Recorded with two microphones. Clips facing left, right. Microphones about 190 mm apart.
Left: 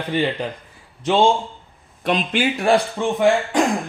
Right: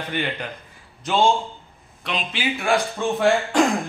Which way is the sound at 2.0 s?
50° left (ahead or behind).